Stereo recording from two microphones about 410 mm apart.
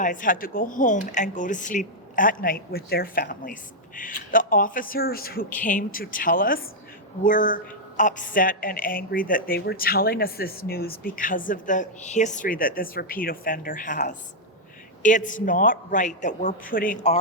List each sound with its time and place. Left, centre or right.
0.0 s a woman's voice: centre